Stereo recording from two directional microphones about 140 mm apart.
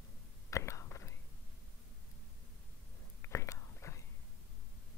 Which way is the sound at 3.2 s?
20° left (ahead or behind).